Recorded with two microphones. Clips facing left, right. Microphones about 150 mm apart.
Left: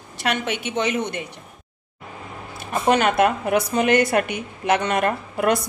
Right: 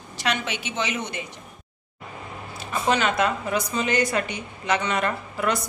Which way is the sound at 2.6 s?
55° left (ahead or behind).